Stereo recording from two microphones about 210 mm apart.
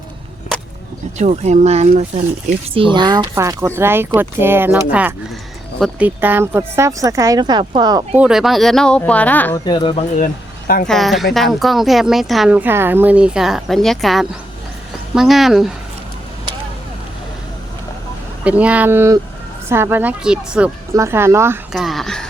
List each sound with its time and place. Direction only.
1.2 s a woman's voice: 35° right (ahead or behind)
7.6 s speech: 30° right (ahead or behind)
8.1 s a woman's voice: 5° right (ahead or behind)
9.6 s speech: 20° left (ahead or behind)
10.8 s a woman's voice: centre (ahead or behind)
18.4 s a woman's voice: 5° right (ahead or behind)